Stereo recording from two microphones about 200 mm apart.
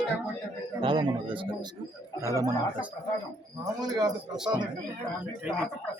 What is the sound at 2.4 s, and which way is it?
Speech, 15° right (ahead or behind).